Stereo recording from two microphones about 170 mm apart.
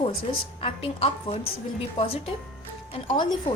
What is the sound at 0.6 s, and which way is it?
Speech, 35° left (ahead or behind).